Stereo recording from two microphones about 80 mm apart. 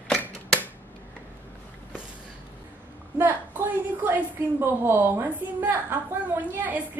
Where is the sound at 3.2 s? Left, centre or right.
Right.